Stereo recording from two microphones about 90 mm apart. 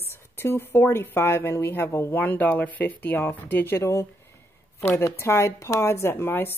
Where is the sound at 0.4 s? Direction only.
25° left (ahead or behind).